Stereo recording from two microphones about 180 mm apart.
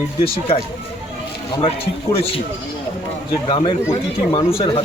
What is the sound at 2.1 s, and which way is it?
Speech, 30° left (ahead or behind).